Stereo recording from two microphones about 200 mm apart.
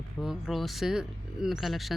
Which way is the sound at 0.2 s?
Centre (ahead or behind).